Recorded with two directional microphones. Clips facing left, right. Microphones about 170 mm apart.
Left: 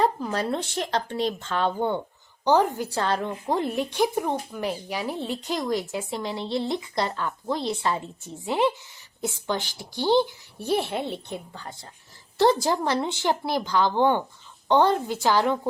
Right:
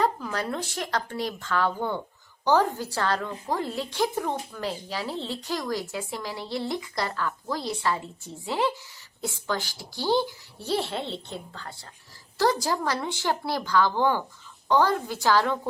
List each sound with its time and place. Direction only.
0.0 s a woman's voice: 25° left (ahead or behind)